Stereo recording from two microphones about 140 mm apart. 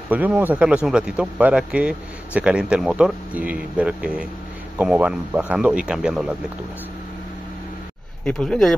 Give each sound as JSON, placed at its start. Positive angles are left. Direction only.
{"t": 0.1, "sound": "speech", "side_deg": -10}
{"t": 8.3, "sound": "speech", "side_deg": 5}